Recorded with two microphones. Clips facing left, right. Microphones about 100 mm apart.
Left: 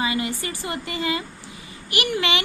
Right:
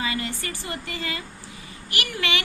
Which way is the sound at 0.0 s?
15° left (ahead or behind).